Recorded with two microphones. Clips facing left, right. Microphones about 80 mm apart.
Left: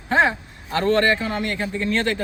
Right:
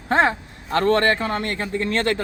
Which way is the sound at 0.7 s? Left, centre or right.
Right.